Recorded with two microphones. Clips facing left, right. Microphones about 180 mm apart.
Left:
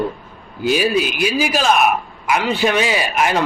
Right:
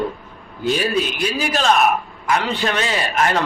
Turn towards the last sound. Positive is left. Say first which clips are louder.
# left 1 dB
turn(degrees=10)  # may be behind; listen again after turning